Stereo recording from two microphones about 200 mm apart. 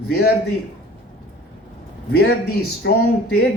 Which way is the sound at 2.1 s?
55° left (ahead or behind).